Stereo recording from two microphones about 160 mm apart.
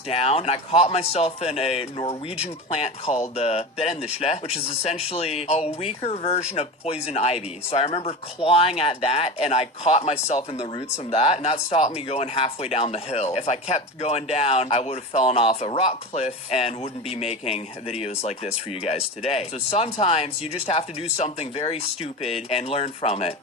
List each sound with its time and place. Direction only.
0.1 s speech: 40° left (ahead or behind)